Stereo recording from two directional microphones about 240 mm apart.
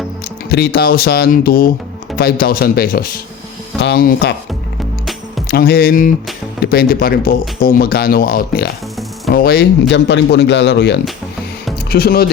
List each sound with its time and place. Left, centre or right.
0.4 s a man's voice: left
5.5 s a man's voice: left